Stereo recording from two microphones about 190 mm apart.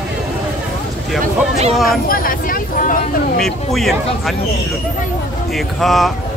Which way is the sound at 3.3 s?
Centre (ahead or behind).